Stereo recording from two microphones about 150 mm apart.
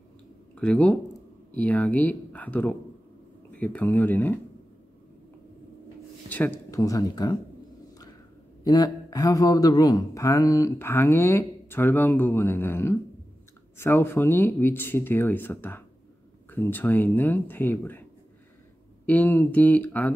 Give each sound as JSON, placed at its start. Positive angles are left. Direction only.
{"t": 0.6, "sound": "speech", "side_deg": 5}
{"t": 6.2, "sound": "speech", "side_deg": 10}
{"t": 6.8, "sound": "speech", "side_deg": 25}
{"t": 8.6, "sound": "speech", "side_deg": 25}
{"t": 19.0, "sound": "speech", "side_deg": 10}